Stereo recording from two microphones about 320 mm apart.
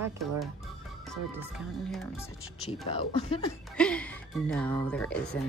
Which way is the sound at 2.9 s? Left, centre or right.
Centre.